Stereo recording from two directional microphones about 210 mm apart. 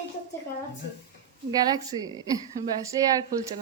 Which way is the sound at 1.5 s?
20° right (ahead or behind).